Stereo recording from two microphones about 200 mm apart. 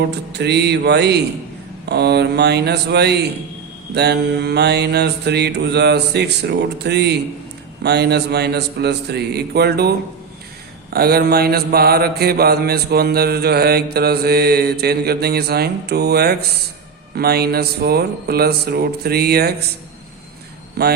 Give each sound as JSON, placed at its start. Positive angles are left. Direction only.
{"t": 0.1, "sound": "mantra", "side_deg": -60}
{"t": 10.9, "sound": "mantra", "side_deg": -50}
{"t": 20.8, "sound": "mantra", "side_deg": -50}